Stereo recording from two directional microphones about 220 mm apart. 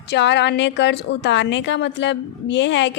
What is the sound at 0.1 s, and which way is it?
A woman's voice, 50° left (ahead or behind).